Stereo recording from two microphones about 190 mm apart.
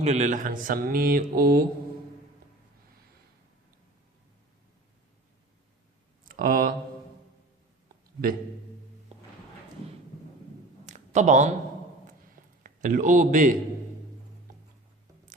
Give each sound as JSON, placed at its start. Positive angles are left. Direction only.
{"t": 0.0, "sound": "speech", "side_deg": -35}
{"t": 6.2, "sound": "speech", "side_deg": -50}
{"t": 9.1, "sound": "music", "side_deg": -35}
{"t": 10.8, "sound": "a sound", "side_deg": -40}
{"t": 12.6, "sound": "a man's voice", "side_deg": -45}